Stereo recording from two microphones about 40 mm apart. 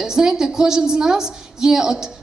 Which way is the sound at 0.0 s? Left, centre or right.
Centre.